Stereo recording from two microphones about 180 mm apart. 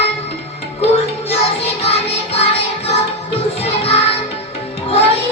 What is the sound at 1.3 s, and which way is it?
Music, 35° left (ahead or behind).